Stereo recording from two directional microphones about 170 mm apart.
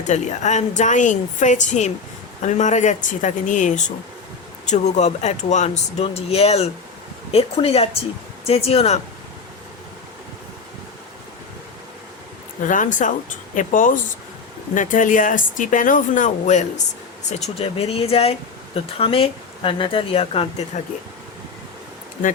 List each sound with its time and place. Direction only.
0.1 s speech: 45° left (ahead or behind)
12.6 s speech: 50° left (ahead or behind)